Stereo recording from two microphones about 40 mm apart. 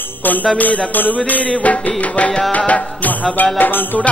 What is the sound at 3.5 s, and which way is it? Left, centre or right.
Music, left.